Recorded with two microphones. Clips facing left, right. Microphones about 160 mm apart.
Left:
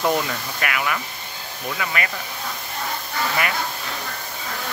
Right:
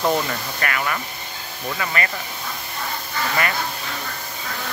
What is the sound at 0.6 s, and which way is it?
Speech, 10° left (ahead or behind).